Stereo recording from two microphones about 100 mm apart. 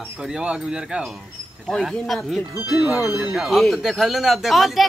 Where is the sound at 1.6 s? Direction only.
5° left (ahead or behind).